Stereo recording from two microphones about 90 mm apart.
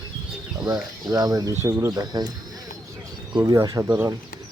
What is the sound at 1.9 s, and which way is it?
Speech, 50° right (ahead or behind).